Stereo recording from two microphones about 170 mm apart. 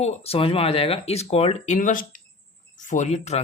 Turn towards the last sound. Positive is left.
turn(degrees=40)  # may be behind; listen again after turning